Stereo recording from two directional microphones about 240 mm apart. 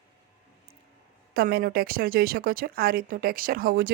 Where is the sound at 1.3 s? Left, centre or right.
Right.